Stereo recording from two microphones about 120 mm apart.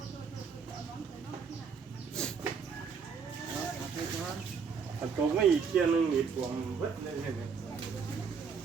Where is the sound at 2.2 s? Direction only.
5° left (ahead or behind).